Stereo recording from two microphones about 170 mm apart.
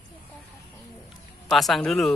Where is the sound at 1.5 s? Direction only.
Centre (ahead or behind).